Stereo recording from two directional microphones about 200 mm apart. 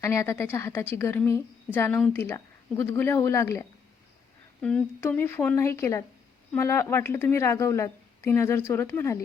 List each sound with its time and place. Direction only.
0.0 s a woman's voice: 15° left (ahead or behind)
4.6 s a woman's voice: 10° left (ahead or behind)